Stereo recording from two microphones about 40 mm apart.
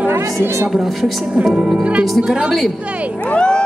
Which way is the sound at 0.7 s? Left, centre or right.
Centre.